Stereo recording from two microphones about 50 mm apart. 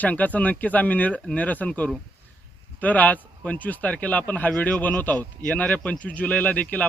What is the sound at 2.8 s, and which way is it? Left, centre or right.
Speech, left.